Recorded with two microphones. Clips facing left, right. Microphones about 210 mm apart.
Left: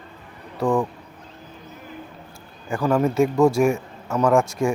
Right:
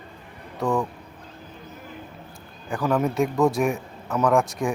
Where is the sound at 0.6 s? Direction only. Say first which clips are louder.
Left 3 dB; 15° left (ahead or behind).